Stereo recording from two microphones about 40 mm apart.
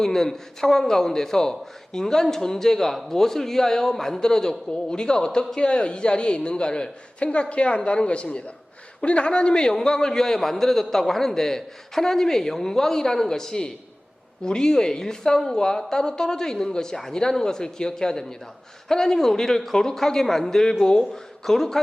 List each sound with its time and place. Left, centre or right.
0.0 s a man's voice: centre